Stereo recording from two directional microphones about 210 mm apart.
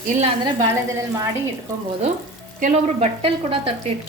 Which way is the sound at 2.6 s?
35° right (ahead or behind).